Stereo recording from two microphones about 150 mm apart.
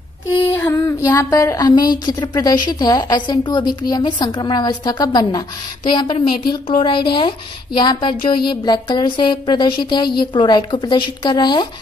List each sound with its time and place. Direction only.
0.6 s speech: 15° left (ahead or behind)